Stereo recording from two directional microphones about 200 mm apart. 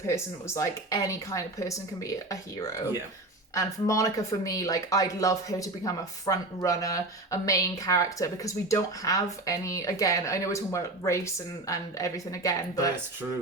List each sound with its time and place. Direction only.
0.1 s speech: 15° left (ahead or behind)